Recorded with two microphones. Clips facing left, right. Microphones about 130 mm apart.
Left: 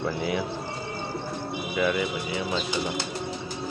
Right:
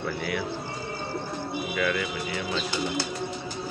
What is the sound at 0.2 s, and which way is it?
Speech, 20° left (ahead or behind).